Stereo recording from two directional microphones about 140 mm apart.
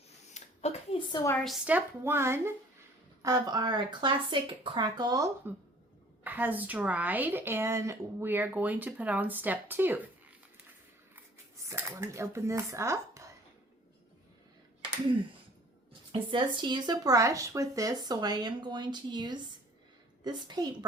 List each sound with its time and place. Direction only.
0.3 s a sound: 50° left (ahead or behind)
1.6 s a woman's voice: 15° right (ahead or behind)
6.2 s a woman's voice: 10° right (ahead or behind)
11.7 s speech: 20° right (ahead or behind)
15.9 s speech: 35° right (ahead or behind)